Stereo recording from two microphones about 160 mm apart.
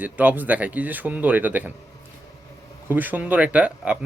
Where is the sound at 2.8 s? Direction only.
10° right (ahead or behind).